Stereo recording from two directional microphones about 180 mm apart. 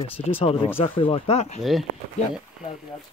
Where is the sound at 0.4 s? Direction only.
30° left (ahead or behind).